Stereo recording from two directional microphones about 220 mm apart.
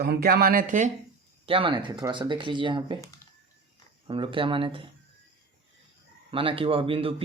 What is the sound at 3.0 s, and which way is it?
Computer keyboard, 15° left (ahead or behind).